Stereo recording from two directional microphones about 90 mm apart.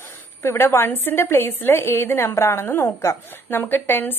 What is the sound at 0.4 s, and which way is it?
A woman's voice, 25° left (ahead or behind).